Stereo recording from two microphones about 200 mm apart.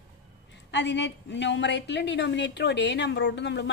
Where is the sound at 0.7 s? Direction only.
60° left (ahead or behind).